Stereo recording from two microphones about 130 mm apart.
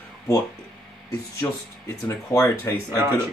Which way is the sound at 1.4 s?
20° left (ahead or behind).